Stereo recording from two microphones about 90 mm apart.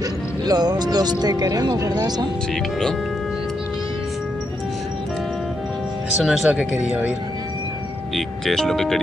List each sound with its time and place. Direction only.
0.5 s speech: 50° right (ahead or behind)
6.2 s speech: 10° right (ahead or behind)
8.2 s speech: 5° left (ahead or behind)